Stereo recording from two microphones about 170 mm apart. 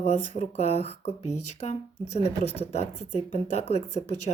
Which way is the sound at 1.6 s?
40° left (ahead or behind).